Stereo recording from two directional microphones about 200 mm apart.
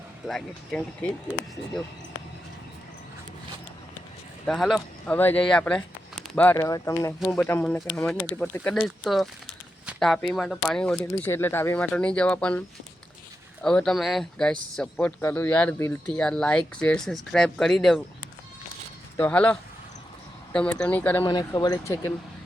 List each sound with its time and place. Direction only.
0.3 s speech: centre (ahead or behind)
4.4 s speech: centre (ahead or behind)
19.1 s speech: 10° left (ahead or behind)
21.2 s speech: 20° left (ahead or behind)